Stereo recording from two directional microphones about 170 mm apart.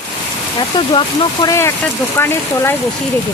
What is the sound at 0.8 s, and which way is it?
Speech, 30° left (ahead or behind).